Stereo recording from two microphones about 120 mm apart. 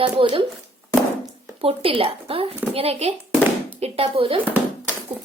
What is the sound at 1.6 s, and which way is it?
A child's voice, 50° right (ahead or behind).